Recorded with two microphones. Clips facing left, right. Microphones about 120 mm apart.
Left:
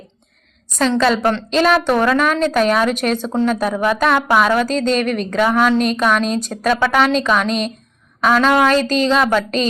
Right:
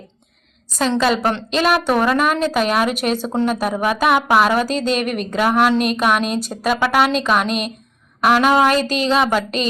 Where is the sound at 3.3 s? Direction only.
15° right (ahead or behind).